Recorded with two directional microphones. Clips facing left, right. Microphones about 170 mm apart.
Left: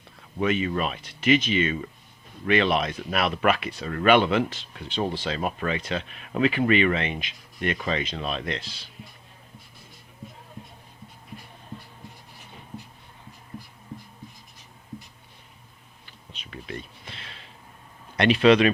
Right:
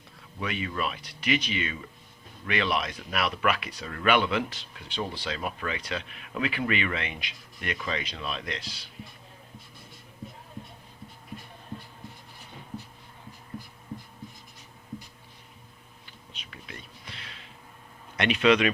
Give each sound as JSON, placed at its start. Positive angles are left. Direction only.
{"t": 0.4, "sound": "speech", "side_deg": 25}
{"t": 16.3, "sound": "a sound", "side_deg": 30}
{"t": 18.2, "sound": "speech", "side_deg": 35}